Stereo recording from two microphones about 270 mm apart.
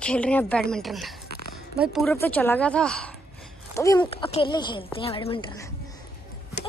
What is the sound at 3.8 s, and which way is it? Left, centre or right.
A woman's voice, centre.